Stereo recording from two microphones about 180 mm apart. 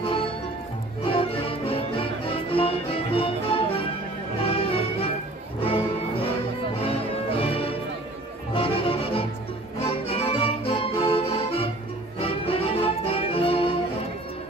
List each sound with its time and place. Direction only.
1.7 s music: 30° left (ahead or behind)